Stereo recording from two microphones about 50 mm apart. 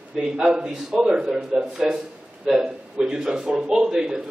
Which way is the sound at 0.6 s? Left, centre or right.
Centre.